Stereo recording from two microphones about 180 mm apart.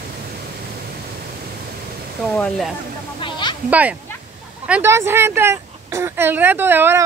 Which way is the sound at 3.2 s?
25° left (ahead or behind).